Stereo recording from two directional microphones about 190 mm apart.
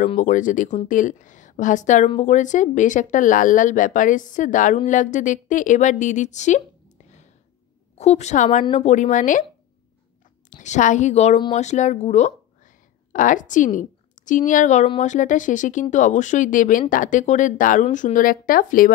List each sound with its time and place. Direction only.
0.1 s a woman's voice: 40° left (ahead or behind)
8.0 s a woman's voice: 35° left (ahead or behind)
10.5 s a woman's voice: 40° left (ahead or behind)